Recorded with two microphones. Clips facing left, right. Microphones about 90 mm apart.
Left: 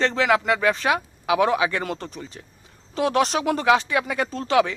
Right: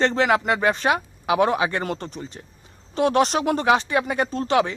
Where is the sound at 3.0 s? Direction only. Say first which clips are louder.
Right 2 dB; 45° right (ahead or behind).